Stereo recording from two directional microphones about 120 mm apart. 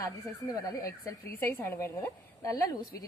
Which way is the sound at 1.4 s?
20° left (ahead or behind).